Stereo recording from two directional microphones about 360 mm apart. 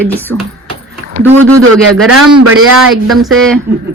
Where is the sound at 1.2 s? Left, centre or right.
Right.